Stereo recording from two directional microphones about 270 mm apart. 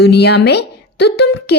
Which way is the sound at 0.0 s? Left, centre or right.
Left.